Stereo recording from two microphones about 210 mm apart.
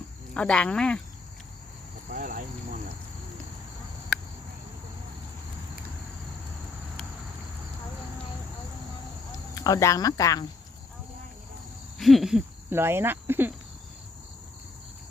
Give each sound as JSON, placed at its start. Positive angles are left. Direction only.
{"t": 0.3, "sound": "speech", "side_deg": 5}
{"t": 2.0, "sound": "speech", "side_deg": -40}
{"t": 9.6, "sound": "speech", "side_deg": 15}
{"t": 11.9, "sound": "speech", "side_deg": 0}